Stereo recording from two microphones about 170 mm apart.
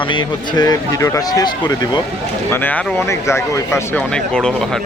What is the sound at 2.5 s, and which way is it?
Speech, 10° left (ahead or behind).